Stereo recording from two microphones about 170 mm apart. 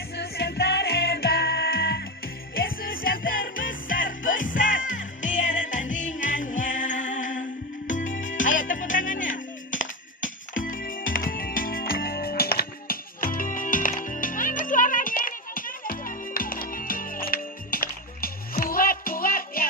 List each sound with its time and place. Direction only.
0.2 s music: 70° left (ahead or behind)